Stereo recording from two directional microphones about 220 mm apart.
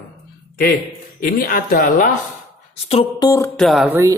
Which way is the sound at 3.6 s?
Centre (ahead or behind).